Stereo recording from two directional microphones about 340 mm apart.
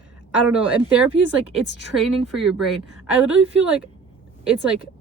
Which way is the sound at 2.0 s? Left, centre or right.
Centre.